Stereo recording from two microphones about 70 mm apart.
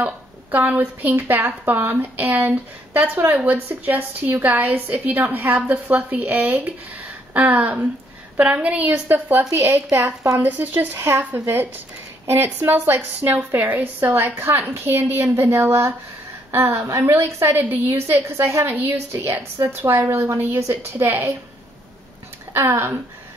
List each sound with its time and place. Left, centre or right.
0.0 s a woman's voice: right
16.9 s a woman's voice: right
22.5 s speech: right